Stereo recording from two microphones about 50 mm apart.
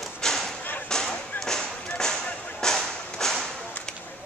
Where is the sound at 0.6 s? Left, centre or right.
Left.